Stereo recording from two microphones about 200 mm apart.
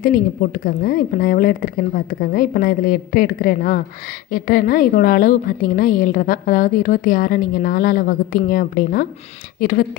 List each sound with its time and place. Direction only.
0.6 s a woman's voice: 45° left (ahead or behind)